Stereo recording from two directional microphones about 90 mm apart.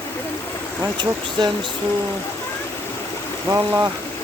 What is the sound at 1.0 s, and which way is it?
Speech, 55° right (ahead or behind).